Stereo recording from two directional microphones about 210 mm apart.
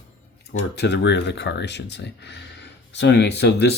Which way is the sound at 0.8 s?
55° left (ahead or behind).